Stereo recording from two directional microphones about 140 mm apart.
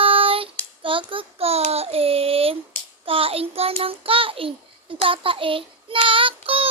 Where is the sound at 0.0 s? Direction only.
40° right (ahead or behind).